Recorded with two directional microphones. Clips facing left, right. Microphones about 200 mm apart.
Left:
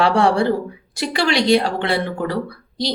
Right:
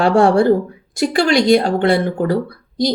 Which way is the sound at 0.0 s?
45° right (ahead or behind).